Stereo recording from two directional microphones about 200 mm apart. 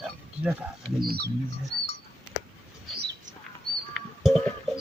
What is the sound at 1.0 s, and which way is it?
Bird, 50° right (ahead or behind).